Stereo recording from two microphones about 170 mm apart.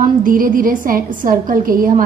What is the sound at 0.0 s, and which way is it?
A woman's voice, 55° right (ahead or behind).